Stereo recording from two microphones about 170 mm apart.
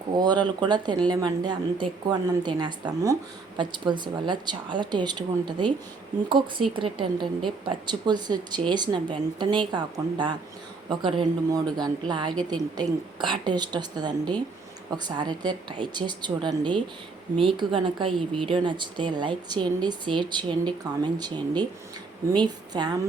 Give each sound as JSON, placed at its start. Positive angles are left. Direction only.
{"t": 0.2, "sound": "a woman's voice", "side_deg": -25}
{"t": 6.7, "sound": "a woman's voice", "side_deg": -30}